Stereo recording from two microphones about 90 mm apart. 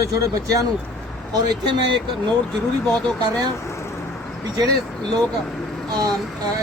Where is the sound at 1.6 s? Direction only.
65° right (ahead or behind).